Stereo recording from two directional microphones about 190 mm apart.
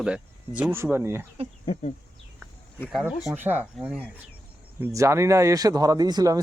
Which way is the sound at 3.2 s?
10° right (ahead or behind).